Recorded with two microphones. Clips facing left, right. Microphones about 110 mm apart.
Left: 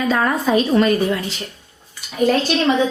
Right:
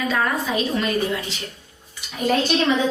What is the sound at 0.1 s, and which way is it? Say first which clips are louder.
Speech: left 8 dB; 40° left (ahead or behind).